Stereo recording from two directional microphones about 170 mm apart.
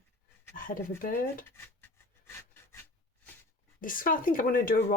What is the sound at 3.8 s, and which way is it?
Speech, 55° left (ahead or behind).